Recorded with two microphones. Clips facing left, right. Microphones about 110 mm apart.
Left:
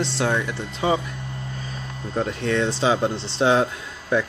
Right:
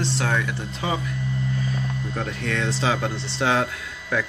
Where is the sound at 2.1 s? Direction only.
25° left (ahead or behind).